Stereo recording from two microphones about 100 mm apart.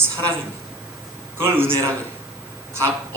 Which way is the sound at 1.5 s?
25° right (ahead or behind).